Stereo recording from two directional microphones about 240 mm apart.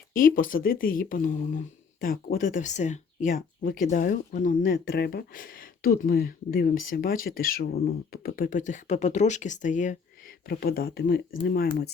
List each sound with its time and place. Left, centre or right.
0.1 s speech: left